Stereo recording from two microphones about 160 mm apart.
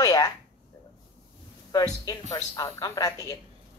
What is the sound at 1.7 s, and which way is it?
A woman's voice, 20° left (ahead or behind).